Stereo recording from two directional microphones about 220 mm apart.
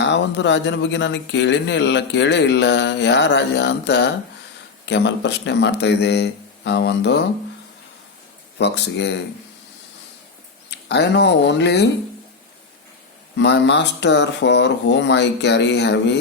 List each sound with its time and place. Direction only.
0.0 s speech: 50° left (ahead or behind)
8.5 s speech: 50° left (ahead or behind)
10.7 s speech: 50° left (ahead or behind)
13.3 s speech: 50° left (ahead or behind)